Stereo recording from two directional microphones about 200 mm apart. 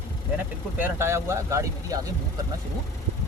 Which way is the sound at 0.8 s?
10° right (ahead or behind).